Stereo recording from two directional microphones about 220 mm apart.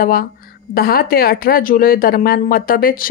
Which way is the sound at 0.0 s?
40° left (ahead or behind).